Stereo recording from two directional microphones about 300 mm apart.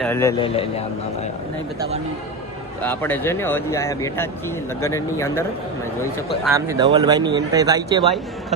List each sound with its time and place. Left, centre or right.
0.0 s speech: centre
2.8 s speech: centre